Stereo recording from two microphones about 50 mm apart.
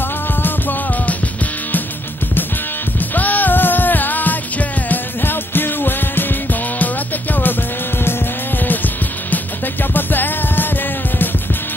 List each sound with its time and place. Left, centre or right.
0.4 s music: left
3.2 s music: left
8.6 s music: left